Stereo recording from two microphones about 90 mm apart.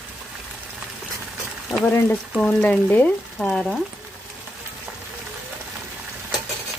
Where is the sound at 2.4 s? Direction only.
10° left (ahead or behind).